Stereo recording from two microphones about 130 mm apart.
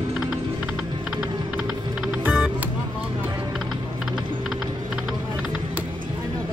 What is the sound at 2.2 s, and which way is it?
Music, 10° right (ahead or behind).